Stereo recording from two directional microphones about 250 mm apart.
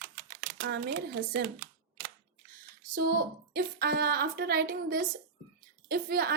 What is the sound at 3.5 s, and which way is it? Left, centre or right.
A woman's voice, right.